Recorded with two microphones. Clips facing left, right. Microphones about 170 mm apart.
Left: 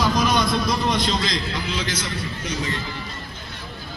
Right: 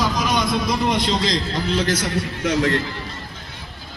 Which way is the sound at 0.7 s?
15° right (ahead or behind).